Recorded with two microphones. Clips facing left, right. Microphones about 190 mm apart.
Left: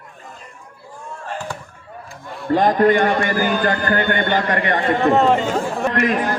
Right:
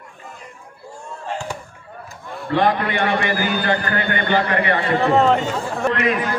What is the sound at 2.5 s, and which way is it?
A man's voice, 40° left (ahead or behind).